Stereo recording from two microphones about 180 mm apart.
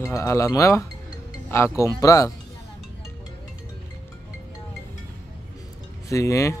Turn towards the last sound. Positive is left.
turn(degrees=15)  # may be behind; listen again after turning